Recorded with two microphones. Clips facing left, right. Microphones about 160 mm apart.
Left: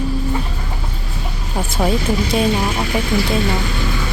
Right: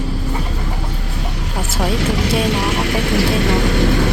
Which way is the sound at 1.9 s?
75° right (ahead or behind).